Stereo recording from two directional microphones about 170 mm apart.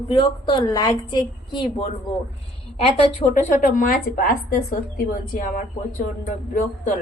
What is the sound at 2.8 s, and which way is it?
A woman's voice, 40° left (ahead or behind).